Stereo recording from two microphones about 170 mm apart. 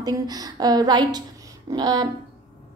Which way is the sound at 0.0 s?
25° right (ahead or behind).